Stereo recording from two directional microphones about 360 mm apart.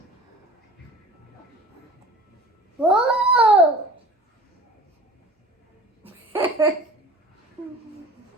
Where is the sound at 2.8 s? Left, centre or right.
Centre.